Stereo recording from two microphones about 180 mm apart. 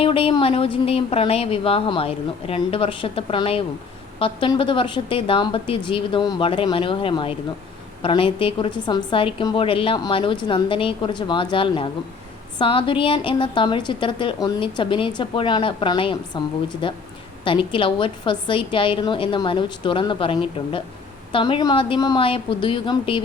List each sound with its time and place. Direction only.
0.0 s a woman's voice: 30° left (ahead or behind)